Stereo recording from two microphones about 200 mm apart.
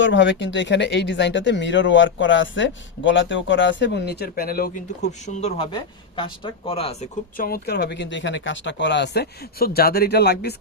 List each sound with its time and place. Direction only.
0.0 s speech: 65° left (ahead or behind); by 4.8 s 45° left (ahead or behind)
5.2 s speech: 35° left (ahead or behind)
7.3 s speech: 50° left (ahead or behind)